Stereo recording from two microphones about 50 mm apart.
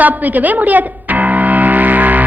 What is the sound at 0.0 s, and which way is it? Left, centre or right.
Speech, right.